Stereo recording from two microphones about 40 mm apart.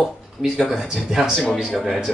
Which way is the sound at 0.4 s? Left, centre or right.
Centre.